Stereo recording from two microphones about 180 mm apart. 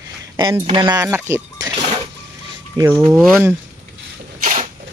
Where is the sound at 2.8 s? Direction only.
20° right (ahead or behind).